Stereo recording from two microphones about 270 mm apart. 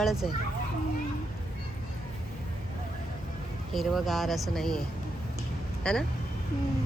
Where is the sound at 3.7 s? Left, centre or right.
Centre.